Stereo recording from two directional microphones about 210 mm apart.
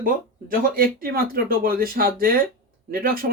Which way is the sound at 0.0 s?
40° right (ahead or behind).